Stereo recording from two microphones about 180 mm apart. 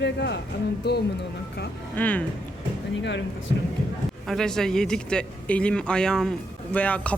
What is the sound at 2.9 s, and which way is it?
Speech, 80° left.